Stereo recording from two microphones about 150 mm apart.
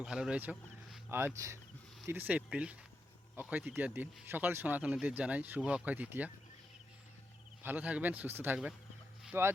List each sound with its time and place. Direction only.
0.0 s speech: 5° right (ahead or behind)
7.6 s speech: 10° right (ahead or behind)